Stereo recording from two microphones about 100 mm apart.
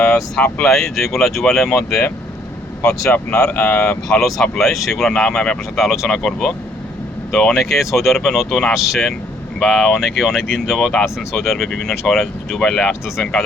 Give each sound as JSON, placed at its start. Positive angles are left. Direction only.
{"t": 0.3, "sound": "speech", "side_deg": 5}
{"t": 3.1, "sound": "speech", "side_deg": 10}
{"t": 3.5, "sound": "speech", "side_deg": 20}
{"t": 4.1, "sound": "speech", "side_deg": 5}